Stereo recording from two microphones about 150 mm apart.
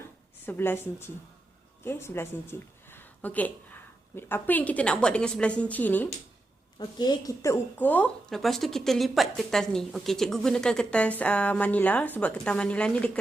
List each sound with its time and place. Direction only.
0.0 s a sound: 15° left (ahead or behind)
1.8 s a woman's voice: 15° left (ahead or behind)
6.7 s speech: 30° left (ahead or behind); by 13.1 s 10° left (ahead or behind)